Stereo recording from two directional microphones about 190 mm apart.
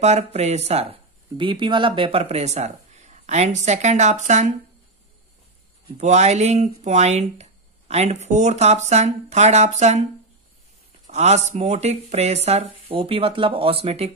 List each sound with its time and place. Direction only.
0.0 s speech: 35° right (ahead or behind)
5.9 s speech: 35° right (ahead or behind)
11.1 s speech: 35° right (ahead or behind)